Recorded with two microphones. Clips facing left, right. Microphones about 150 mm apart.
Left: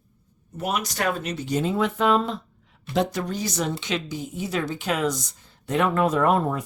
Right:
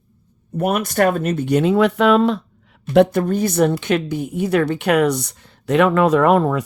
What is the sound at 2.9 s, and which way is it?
A woman's voice, 60° right (ahead or behind).